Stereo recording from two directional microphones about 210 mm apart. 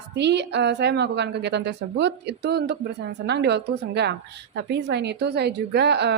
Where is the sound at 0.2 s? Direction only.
55° right (ahead or behind).